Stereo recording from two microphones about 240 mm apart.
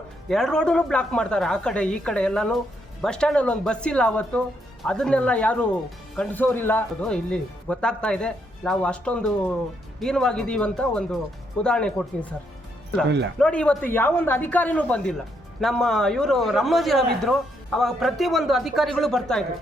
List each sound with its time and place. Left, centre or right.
0.3 s a man's voice: centre
13.1 s speech: right
13.4 s a man's voice: centre